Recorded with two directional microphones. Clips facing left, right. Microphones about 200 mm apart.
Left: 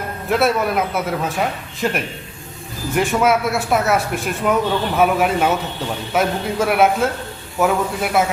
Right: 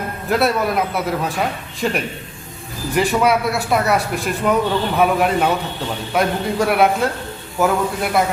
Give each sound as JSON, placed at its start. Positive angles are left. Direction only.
{"t": 0.3, "sound": "speech", "side_deg": 0}